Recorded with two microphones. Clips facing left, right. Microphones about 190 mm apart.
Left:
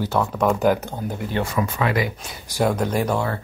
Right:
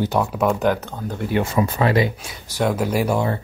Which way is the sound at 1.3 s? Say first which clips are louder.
Right 5 dB; 25° right (ahead or behind).